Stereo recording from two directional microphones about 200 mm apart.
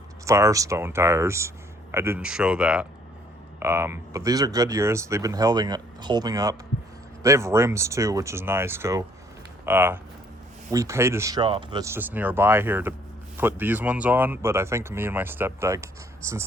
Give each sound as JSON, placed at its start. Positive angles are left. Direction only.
{"t": 0.3, "sound": "speech", "side_deg": -15}